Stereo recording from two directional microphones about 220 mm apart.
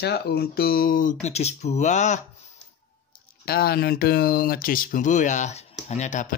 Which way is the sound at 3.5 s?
45° left (ahead or behind).